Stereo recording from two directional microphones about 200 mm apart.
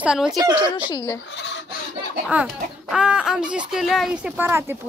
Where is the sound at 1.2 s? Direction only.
60° left (ahead or behind).